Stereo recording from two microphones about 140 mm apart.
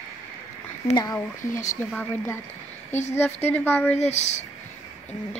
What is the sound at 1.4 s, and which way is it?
Speech, 65° left (ahead or behind).